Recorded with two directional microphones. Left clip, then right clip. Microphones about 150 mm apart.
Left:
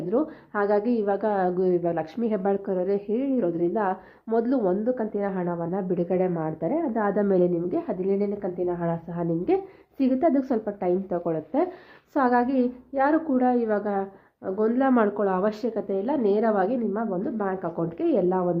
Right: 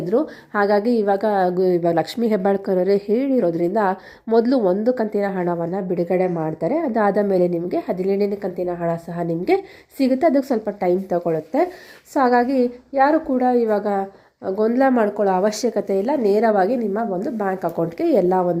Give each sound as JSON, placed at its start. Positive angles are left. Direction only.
{"t": 0.1, "sound": "a woman's voice", "side_deg": -30}
{"t": 7.1, "sound": "a woman's voice", "side_deg": -15}
{"t": 14.9, "sound": "a woman's voice", "side_deg": -10}
{"t": 15.2, "sound": "a woman's voice", "side_deg": -25}